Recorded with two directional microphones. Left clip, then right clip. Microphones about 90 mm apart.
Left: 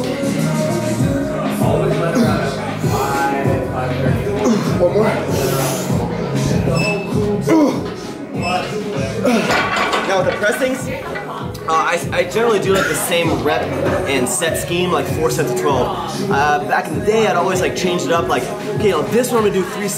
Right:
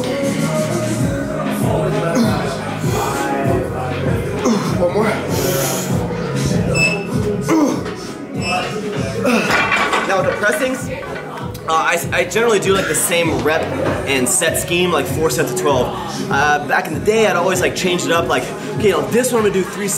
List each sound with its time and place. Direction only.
4.5 s music: centre (ahead or behind)
7.4 s music: 5° right (ahead or behind)
9.2 s music: centre (ahead or behind)
10.0 s dishes: centre (ahead or behind)
11.7 s speech: centre (ahead or behind)